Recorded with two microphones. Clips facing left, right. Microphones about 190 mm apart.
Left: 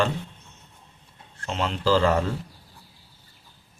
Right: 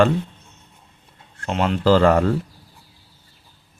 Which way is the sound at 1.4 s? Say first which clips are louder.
Right 6 dB; 55° right (ahead or behind).